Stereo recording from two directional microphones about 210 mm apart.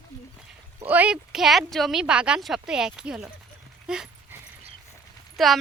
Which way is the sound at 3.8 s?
5° right (ahead or behind).